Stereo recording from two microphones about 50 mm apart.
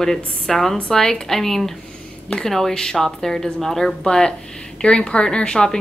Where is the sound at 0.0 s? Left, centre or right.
Centre.